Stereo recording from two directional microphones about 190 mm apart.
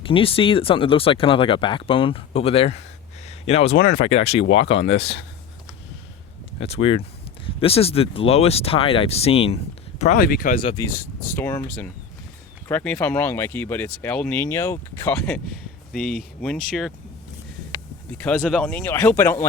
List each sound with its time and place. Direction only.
0.0 s speech: 30° left (ahead or behind)
3.2 s a sound: 30° left (ahead or behind)
3.8 s speech: 55° left (ahead or behind)
4.1 s speech: 30° left (ahead or behind)
4.9 s speech: 65° left (ahead or behind)
6.6 s speech: 30° left (ahead or behind)
10.2 s speech: 50° left (ahead or behind)
10.6 s speech: 25° left (ahead or behind)
10.9 s speech: 10° left (ahead or behind)
18.2 s speech: 5° left (ahead or behind)